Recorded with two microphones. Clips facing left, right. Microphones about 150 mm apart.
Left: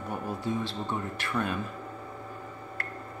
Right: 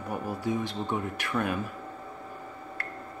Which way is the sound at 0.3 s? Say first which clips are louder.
Right 1 dB; 15° right (ahead or behind).